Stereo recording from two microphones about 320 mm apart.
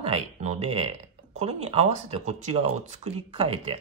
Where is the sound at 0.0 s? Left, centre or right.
Centre.